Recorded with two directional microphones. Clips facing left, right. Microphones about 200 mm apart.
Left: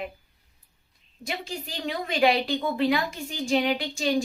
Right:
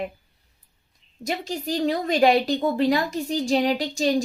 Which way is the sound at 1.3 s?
40° right (ahead or behind).